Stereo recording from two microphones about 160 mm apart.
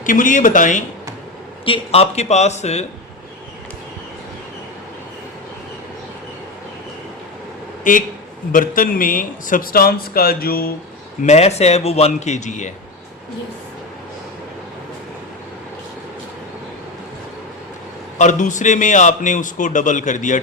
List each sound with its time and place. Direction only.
0.0 s a man's voice: 55° left (ahead or behind)
1.6 s a man's voice: 35° left (ahead or behind)
7.9 s a man's voice: 55° left (ahead or behind)
11.2 s a man's voice: 45° left (ahead or behind)
18.2 s a man's voice: 50° left (ahead or behind)